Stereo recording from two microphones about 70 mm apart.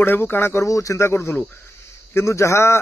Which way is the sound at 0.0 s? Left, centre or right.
Left.